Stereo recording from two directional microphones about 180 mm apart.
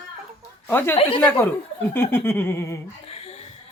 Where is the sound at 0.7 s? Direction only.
10° left (ahead or behind).